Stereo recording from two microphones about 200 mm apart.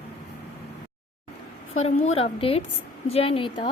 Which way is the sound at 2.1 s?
30° left (ahead or behind).